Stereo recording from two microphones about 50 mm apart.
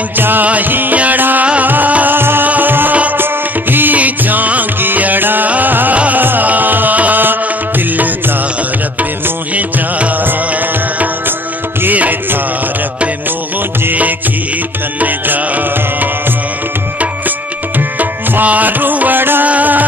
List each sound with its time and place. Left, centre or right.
0.2 s music: right
2.1 s music: right
9.6 s music: right
11.8 s music: right
15.0 s music: right
17.7 s music: right
19.4 s music: right